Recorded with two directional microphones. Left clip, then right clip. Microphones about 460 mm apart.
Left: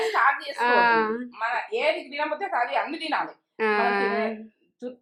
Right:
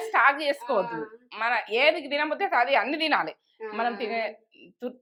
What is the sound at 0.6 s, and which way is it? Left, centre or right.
Speech, left.